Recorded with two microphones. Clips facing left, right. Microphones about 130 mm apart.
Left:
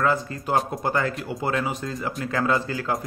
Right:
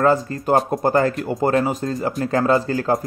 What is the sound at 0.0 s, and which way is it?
A man's voice, 40° right (ahead or behind).